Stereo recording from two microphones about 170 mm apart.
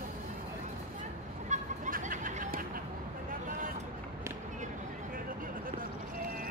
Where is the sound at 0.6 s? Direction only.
45° right (ahead or behind).